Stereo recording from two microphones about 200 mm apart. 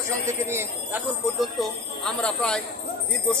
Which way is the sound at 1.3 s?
Centre (ahead or behind).